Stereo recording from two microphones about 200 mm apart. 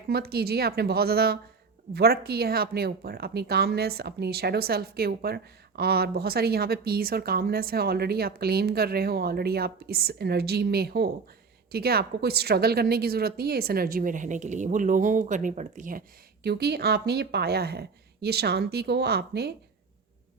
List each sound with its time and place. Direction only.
0.1 s speech: 50° right (ahead or behind)